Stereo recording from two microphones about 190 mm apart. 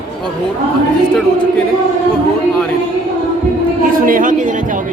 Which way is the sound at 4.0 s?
45° right (ahead or behind).